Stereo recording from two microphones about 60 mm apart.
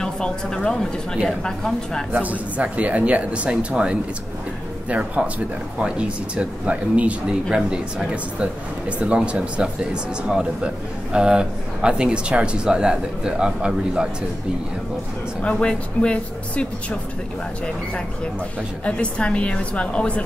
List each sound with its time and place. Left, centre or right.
0.0 s a sound: centre
1.4 s a woman's voice: centre
2.1 s speech: right
15.4 s a woman's voice: centre
18.9 s a woman's voice: centre